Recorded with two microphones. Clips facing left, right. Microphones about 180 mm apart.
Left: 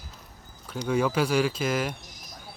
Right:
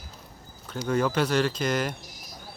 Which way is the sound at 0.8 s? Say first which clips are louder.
Even; 5° left (ahead or behind).